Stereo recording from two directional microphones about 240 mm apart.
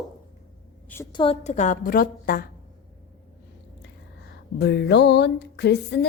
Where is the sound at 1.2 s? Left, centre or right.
Left.